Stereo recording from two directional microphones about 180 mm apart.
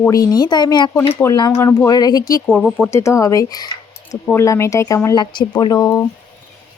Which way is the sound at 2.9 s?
15° left (ahead or behind).